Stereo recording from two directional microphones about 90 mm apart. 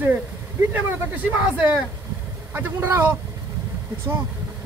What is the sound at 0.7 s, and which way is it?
A man's voice, 20° right (ahead or behind).